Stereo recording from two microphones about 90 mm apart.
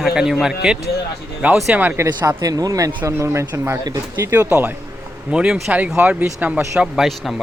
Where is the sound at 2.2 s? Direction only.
45° right (ahead or behind).